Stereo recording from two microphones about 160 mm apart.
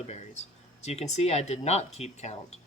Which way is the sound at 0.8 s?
40° left (ahead or behind).